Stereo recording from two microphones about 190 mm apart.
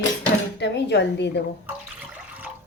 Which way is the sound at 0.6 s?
65° left (ahead or behind).